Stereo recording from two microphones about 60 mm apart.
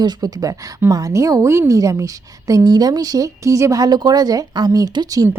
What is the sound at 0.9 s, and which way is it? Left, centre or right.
A woman's voice, right.